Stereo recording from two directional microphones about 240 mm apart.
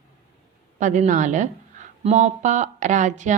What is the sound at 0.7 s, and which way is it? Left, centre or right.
A woman's voice, right.